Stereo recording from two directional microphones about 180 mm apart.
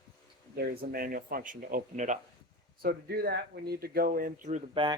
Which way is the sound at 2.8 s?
60° right (ahead or behind).